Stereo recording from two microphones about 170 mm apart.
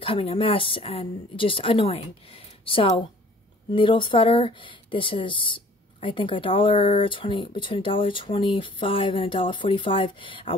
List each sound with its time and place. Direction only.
0.0 s speech: 30° left (ahead or behind)